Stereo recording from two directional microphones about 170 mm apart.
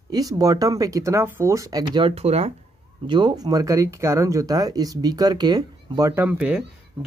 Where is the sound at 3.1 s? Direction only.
25° right (ahead or behind).